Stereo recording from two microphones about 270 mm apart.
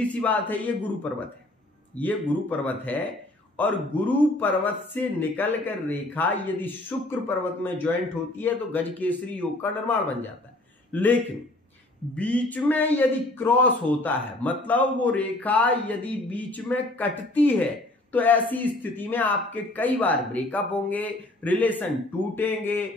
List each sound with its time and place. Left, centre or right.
0.0 s a man's voice: centre
2.0 s a man's voice: centre
12.2 s a man's voice: centre